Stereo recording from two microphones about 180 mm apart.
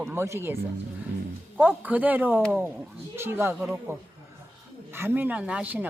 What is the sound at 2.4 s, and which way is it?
Speech, 5° left (ahead or behind).